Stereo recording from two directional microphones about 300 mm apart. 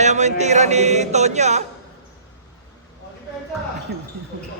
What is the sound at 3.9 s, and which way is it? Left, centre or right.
Speech, right.